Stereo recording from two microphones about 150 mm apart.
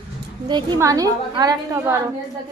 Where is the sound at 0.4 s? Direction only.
30° right (ahead or behind).